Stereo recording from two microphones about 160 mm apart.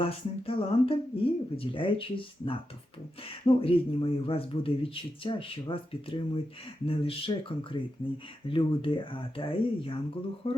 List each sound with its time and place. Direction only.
0.0 s speech: 35° left (ahead or behind)